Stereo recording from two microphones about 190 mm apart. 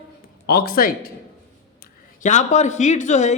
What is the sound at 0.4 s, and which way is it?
Speech, 55° left (ahead or behind).